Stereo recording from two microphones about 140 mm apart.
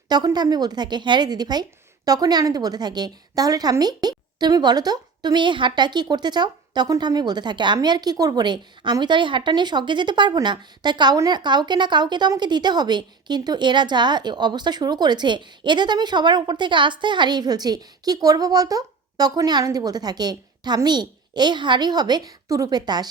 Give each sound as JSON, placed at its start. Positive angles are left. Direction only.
{"t": 0.1, "sound": "a woman's voice", "side_deg": -30}